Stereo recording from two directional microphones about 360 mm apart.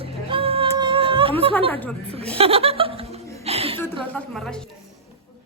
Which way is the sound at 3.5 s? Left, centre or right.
Centre.